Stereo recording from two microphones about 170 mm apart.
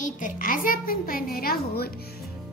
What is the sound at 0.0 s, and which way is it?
A child's voice, 50° left (ahead or behind).